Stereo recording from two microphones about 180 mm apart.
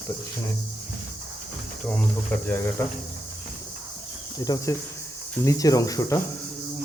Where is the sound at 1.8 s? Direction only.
5° left (ahead or behind).